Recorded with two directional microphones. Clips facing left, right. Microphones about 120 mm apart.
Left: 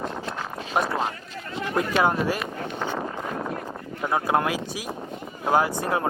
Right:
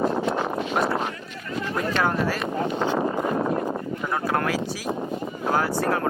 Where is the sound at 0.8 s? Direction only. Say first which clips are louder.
Left 2 dB; 25° left (ahead or behind).